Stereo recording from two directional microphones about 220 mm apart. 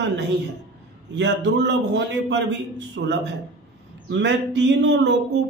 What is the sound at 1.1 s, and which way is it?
A man's voice, 55° right (ahead or behind).